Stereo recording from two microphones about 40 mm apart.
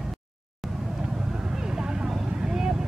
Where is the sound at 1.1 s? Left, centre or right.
Centre.